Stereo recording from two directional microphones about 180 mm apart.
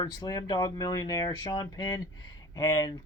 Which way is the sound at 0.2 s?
20° left (ahead or behind).